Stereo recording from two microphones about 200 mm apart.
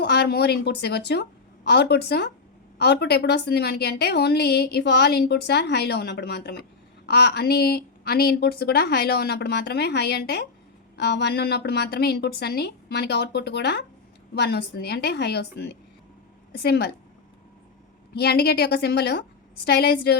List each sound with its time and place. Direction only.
0.0 s a woman's voice: 55° left (ahead or behind)
18.1 s speech: 55° left (ahead or behind)